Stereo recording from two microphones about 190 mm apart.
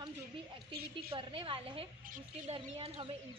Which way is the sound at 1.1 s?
25° right (ahead or behind).